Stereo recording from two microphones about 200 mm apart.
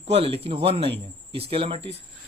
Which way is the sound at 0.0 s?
30° right (ahead or behind).